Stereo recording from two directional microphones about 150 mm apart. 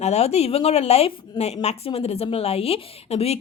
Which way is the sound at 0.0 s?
45° left (ahead or behind).